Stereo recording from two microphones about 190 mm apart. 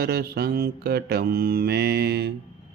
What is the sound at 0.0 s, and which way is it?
Mantra, 55° right (ahead or behind).